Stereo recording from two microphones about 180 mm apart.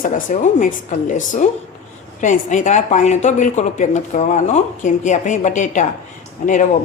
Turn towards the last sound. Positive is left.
turn(degrees=45)  # may be behind; listen again after turning